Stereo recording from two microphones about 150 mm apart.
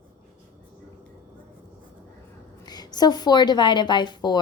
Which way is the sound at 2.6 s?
25° left (ahead or behind).